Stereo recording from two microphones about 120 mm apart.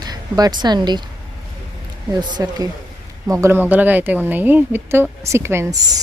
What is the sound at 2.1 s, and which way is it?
Speech, 35° right (ahead or behind).